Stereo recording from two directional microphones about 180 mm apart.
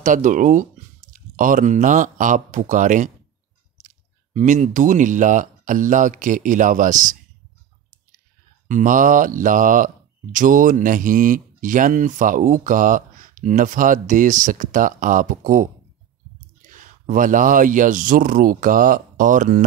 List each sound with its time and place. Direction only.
0.0 s speech: 45° right (ahead or behind)
8.6 s speech: 45° right (ahead or behind)